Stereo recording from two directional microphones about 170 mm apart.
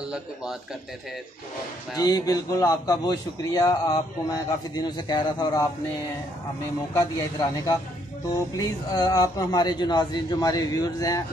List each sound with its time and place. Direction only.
2.0 s a man's voice: 20° left (ahead or behind)
6.9 s a man's voice: 20° left (ahead or behind)